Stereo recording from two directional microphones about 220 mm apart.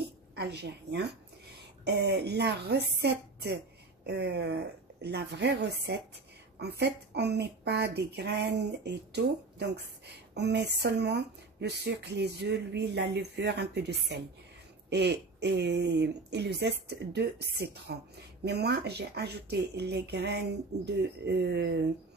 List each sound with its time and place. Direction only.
0.4 s speech: 50° right (ahead or behind)